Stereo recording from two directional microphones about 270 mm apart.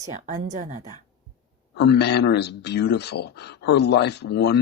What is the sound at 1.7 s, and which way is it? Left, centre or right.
Speech, left.